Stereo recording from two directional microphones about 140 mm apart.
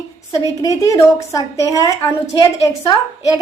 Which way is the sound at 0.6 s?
25° left (ahead or behind).